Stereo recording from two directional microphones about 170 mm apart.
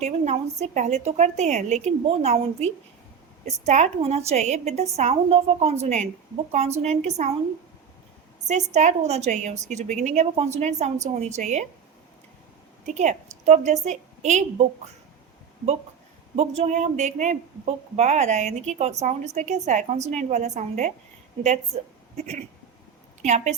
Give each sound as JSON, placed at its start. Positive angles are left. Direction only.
{"t": 0.0, "sound": "a woman's voice", "side_deg": -40}
{"t": 8.7, "sound": "a woman's voice", "side_deg": -40}
{"t": 12.8, "sound": "a woman's voice", "side_deg": -45}
{"t": 16.3, "sound": "a woman's voice", "side_deg": -40}